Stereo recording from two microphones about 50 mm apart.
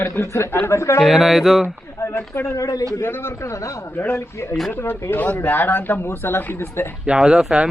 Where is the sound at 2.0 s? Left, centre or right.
Left.